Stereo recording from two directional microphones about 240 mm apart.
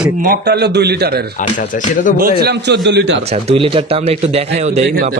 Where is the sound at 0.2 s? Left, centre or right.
Right.